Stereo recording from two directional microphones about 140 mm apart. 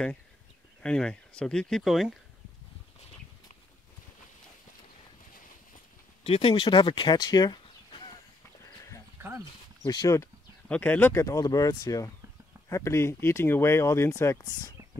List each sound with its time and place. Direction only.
0.8 s speech: 5° left (ahead or behind)
6.2 s speech: 40° left (ahead or behind)
9.8 s speech: 25° left (ahead or behind)
10.7 s speech: 10° left (ahead or behind)